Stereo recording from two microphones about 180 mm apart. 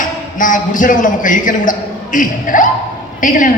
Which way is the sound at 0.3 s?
45° left (ahead or behind).